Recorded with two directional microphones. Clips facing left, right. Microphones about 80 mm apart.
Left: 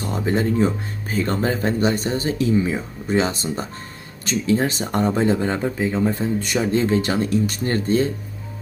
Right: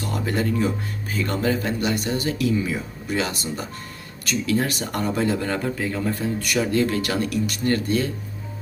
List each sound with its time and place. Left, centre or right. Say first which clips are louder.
0.0 s speech: left 3 dB; left